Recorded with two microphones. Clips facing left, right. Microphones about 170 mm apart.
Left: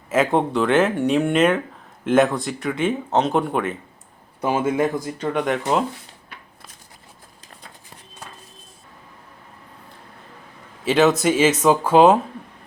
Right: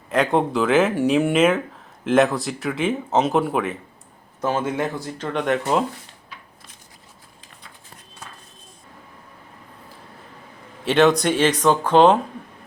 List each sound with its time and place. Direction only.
0.1 s speech: centre (ahead or behind)
4.4 s speech: 10° left (ahead or behind)
6.3 s a sound: 60° left (ahead or behind)
10.8 s speech: centre (ahead or behind)